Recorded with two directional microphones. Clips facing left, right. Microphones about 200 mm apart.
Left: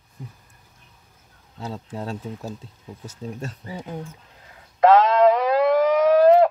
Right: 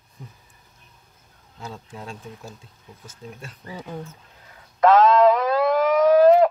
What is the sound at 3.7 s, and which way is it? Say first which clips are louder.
Speech: right 3 dB; 15° left (ahead or behind).